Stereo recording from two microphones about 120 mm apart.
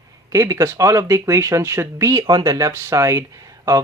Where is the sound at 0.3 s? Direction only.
25° right (ahead or behind).